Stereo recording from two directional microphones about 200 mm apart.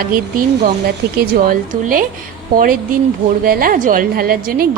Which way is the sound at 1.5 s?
45° right (ahead or behind).